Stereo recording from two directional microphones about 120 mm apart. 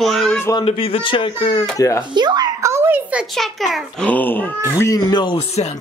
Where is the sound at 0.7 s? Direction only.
50° left (ahead or behind).